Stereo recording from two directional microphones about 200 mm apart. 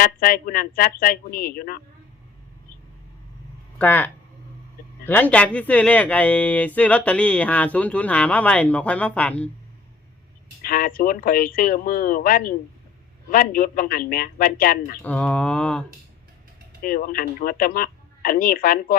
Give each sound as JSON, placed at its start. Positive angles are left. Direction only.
{"t": 0.0, "sound": "speech", "side_deg": 45}
{"t": 3.8, "sound": "speech", "side_deg": 10}
{"t": 10.6, "sound": "speech", "side_deg": 45}
{"t": 15.0, "sound": "speech", "side_deg": 10}
{"t": 16.8, "sound": "speech", "side_deg": 45}